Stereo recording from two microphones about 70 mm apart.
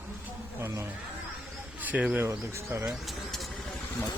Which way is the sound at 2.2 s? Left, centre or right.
Right.